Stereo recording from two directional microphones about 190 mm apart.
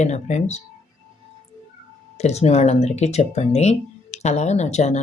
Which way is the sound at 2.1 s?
35° left (ahead or behind).